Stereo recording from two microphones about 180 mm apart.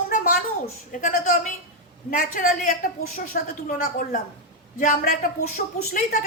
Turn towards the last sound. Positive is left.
turn(degrees=50)  # may be behind; listen again after turning